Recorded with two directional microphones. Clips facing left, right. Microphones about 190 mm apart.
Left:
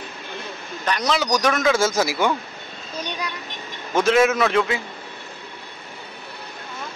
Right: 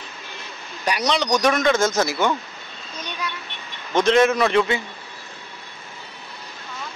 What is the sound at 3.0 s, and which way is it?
Vehicle, 35° left (ahead or behind).